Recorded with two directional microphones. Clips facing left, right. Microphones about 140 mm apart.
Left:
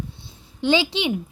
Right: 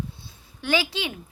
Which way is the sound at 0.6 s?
25° left (ahead or behind).